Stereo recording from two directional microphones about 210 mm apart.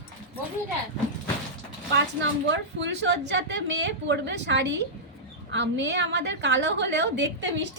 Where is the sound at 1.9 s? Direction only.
60° right (ahead or behind).